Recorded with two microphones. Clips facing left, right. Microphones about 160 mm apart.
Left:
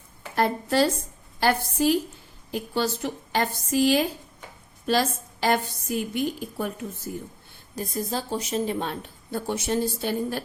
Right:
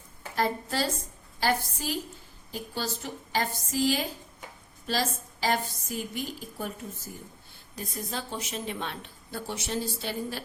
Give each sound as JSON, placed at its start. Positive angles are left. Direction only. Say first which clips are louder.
{"t": 0.3, "sound": "a woman's voice", "louder": "left 6 dB", "side_deg": 65}
{"t": 7.8, "sound": "a woman's voice", "louder": "left 7 dB", "side_deg": 40}